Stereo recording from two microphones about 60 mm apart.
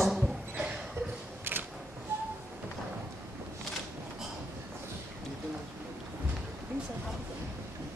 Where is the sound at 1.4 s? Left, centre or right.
Right.